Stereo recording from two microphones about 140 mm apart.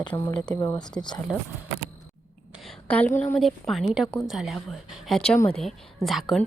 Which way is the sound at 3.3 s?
Centre (ahead or behind).